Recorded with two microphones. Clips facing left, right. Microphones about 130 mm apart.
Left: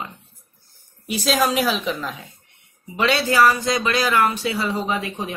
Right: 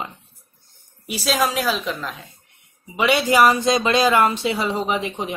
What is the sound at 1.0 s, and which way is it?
A woman's voice, 5° right (ahead or behind).